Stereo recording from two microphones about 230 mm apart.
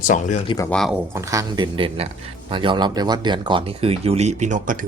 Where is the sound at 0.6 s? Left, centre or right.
Centre.